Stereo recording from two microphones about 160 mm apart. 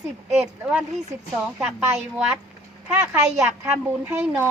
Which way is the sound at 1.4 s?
5° right (ahead or behind).